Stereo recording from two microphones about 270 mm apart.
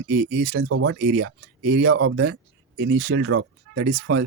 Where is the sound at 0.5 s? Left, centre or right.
Right.